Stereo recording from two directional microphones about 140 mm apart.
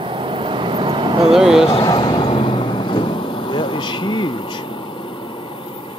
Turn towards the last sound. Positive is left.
turn(degrees=35)  # may be behind; listen again after turning